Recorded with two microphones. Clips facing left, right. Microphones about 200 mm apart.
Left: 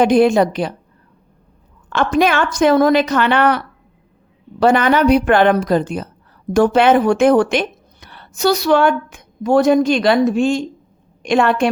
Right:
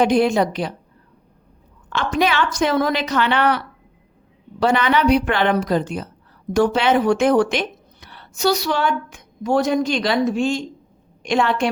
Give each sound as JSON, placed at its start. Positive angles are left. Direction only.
{"t": 0.0, "sound": "a woman's voice", "side_deg": 50}
{"t": 1.9, "sound": "a woman's voice", "side_deg": 50}
{"t": 4.6, "sound": "a woman's voice", "side_deg": 50}